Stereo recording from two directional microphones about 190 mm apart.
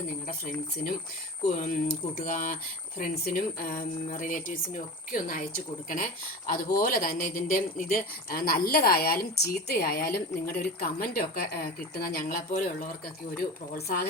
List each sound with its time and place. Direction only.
0.3 s a woman's voice: 45° left (ahead or behind)
2.1 s a woman's voice: 45° left (ahead or behind)